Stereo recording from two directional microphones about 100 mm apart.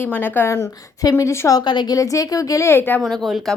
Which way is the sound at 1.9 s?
35° left (ahead or behind).